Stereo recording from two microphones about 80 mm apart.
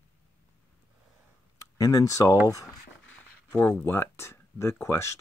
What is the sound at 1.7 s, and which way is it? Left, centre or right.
Speech, left.